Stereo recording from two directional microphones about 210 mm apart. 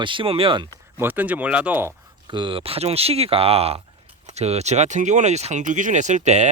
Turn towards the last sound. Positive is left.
turn(degrees=-35)  # may be behind; listen again after turning